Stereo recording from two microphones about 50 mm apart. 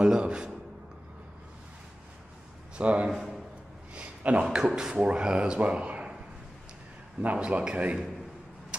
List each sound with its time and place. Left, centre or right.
0.0 s speech: centre
2.8 s speech: right
3.1 s a man's voice: centre
3.9 s a sound: right
4.4 s speech: centre
7.2 s speech: right